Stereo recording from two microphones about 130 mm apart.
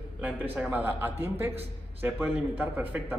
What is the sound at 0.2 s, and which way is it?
A man's voice, 10° right (ahead or behind).